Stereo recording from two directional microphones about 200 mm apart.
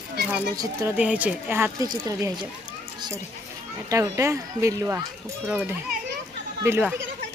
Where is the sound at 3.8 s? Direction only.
15° right (ahead or behind).